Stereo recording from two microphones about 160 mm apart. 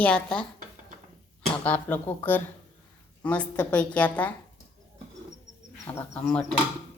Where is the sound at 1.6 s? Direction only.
10° left (ahead or behind).